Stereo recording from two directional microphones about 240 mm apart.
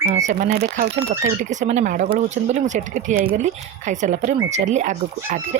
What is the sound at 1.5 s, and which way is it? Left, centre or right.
Speech, right.